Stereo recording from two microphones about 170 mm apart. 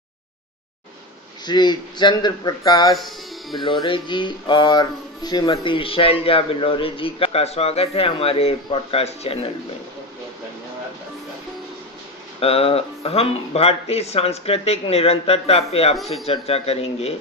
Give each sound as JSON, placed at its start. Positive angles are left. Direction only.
{"t": 1.4, "sound": "speech", "side_deg": 25}
{"t": 3.0, "sound": "speech", "side_deg": 0}
{"t": 3.6, "sound": "speech", "side_deg": 30}
{"t": 12.4, "sound": "speech", "side_deg": 35}